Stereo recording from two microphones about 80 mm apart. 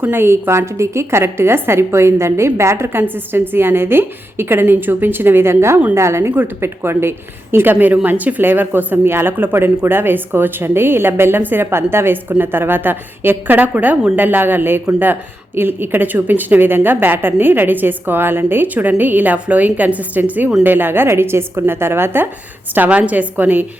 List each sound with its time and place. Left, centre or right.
0.0 s a woman's voice: right